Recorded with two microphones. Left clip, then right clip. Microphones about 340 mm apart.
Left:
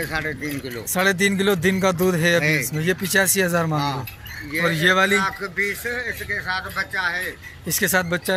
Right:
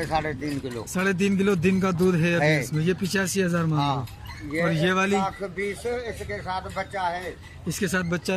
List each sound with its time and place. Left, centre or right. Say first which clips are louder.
0.0 s speech: left 1 dB; right
0.9 s speech: left 6 dB; centre
5.2 s speech: left 5 dB; centre
7.6 s speech: left 7 dB; centre